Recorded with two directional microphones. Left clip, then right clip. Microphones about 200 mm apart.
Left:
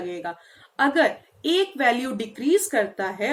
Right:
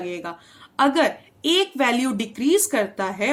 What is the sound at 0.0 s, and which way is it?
A woman's voice, 55° right (ahead or behind).